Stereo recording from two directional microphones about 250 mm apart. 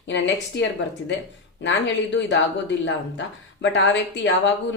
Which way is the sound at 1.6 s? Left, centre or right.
Left.